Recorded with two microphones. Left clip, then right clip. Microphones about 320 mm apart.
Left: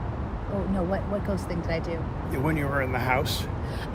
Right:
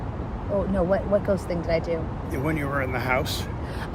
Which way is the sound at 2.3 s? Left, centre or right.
Centre.